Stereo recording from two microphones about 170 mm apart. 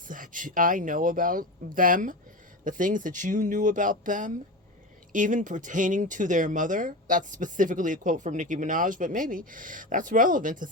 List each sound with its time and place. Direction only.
0.1 s speech: 50° right (ahead or behind)